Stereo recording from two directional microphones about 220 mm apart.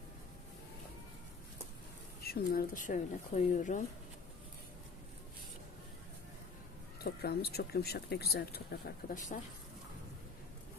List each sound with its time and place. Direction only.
2.2 s speech: 45° left (ahead or behind)
7.0 s speech: 45° left (ahead or behind)